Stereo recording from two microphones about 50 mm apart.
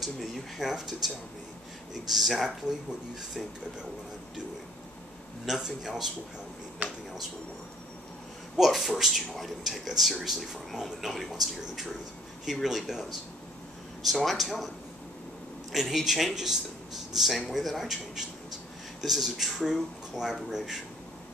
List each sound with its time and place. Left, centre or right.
0.0 s speech: centre
5.6 s speech: centre
6.8 s a sound: right
8.5 s speech: centre
15.7 s speech: centre